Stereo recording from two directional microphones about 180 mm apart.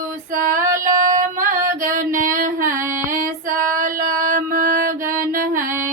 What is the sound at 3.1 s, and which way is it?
Female singing, 50° right (ahead or behind).